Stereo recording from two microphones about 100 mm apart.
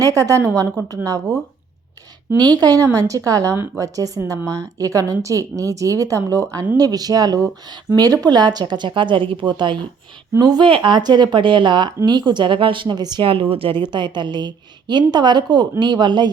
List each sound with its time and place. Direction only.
0.0 s a woman's voice: 35° right (ahead or behind)
2.6 s a woman's voice: 35° right (ahead or behind)
10.7 s a woman's voice: 55° right (ahead or behind)
13.2 s a woman's voice: 65° right (ahead or behind); by 16.3 s 50° right (ahead or behind)